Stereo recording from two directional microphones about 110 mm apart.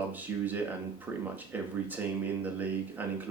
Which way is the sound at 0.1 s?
15° right (ahead or behind).